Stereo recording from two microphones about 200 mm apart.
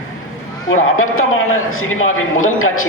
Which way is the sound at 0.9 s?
90° left.